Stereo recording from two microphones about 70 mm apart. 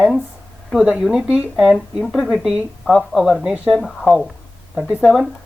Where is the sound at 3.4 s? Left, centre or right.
Centre.